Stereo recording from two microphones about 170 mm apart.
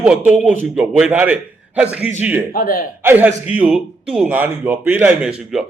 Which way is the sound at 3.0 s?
10° right (ahead or behind).